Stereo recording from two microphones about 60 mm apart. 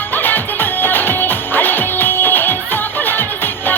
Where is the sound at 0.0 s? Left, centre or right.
Left.